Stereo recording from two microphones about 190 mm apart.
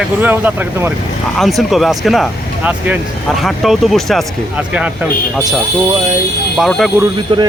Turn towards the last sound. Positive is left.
turn(degrees=-20)  # may be behind; listen again after turning